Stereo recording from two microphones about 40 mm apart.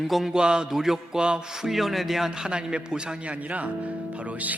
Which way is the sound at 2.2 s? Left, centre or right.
Centre.